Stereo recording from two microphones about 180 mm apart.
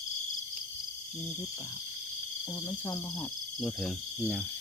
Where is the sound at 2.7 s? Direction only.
20° left (ahead or behind).